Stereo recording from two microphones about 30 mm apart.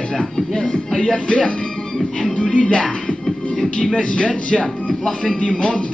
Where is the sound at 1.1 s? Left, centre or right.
Left.